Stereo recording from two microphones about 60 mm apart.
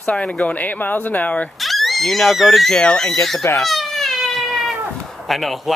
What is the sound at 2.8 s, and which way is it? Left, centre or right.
Speech, centre.